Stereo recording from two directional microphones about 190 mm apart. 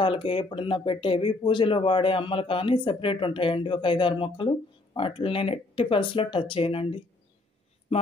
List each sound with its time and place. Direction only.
0.0 s speech: 25° left (ahead or behind)